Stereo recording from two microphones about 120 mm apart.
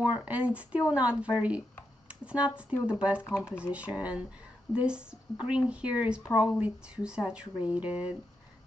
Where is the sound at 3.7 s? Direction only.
10° right (ahead or behind).